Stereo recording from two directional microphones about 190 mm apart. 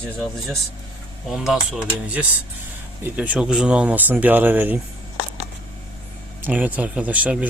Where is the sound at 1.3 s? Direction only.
Centre (ahead or behind).